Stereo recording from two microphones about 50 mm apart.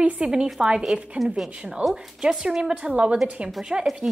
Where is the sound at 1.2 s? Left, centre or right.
Centre.